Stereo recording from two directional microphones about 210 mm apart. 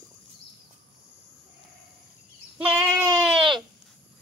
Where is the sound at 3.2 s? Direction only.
Centre (ahead or behind).